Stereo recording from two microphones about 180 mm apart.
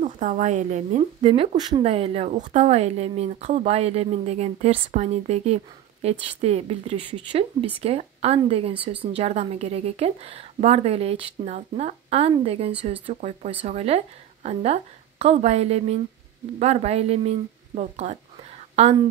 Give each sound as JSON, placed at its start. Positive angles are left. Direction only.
{"t": 0.0, "sound": "speech", "side_deg": -45}